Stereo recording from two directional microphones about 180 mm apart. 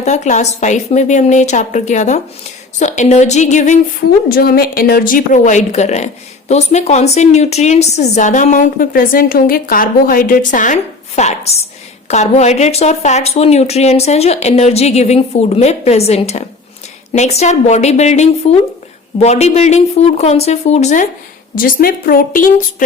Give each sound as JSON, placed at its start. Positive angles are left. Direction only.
{"t": 0.0, "sound": "a woman's voice", "side_deg": 40}
{"t": 4.3, "sound": "a woman's voice", "side_deg": 55}
{"t": 21.5, "sound": "a woman's voice", "side_deg": 50}